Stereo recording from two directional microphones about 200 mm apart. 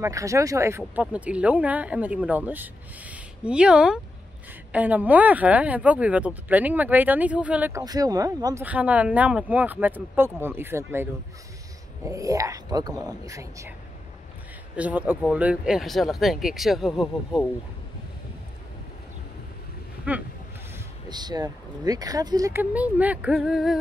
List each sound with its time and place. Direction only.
0.0 s speech: 15° right (ahead or behind)
12.1 s speech: 15° right (ahead or behind)
14.8 s speech: 10° right (ahead or behind)
20.1 s speech: 10° right (ahead or behind)
21.1 s speech: 20° right (ahead or behind); by 23.8 s centre (ahead or behind)